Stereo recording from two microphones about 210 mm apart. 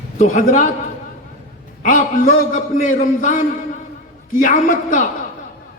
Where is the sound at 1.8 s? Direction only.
40° left (ahead or behind).